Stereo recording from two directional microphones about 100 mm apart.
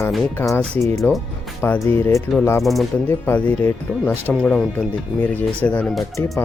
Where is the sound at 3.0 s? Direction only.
20° left (ahead or behind).